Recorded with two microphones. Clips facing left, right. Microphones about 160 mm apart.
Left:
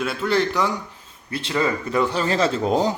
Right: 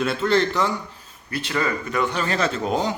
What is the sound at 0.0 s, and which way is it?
Speech, 10° left (ahead or behind).